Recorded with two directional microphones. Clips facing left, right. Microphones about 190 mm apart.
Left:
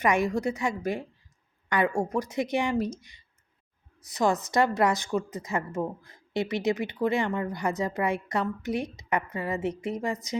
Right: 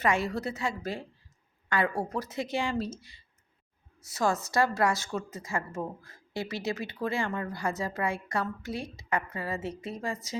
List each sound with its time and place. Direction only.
0.0 s speech: 15° left (ahead or behind)